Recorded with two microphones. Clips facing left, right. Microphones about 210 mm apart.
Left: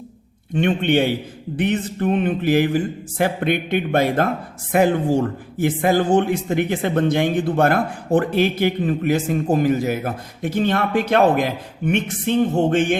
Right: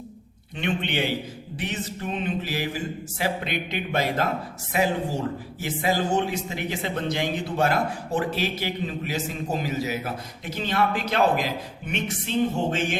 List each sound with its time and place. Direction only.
0.5 s speech: 50° left (ahead or behind)
1.5 s music: 55° left (ahead or behind)
4.7 s speech: 55° left (ahead or behind)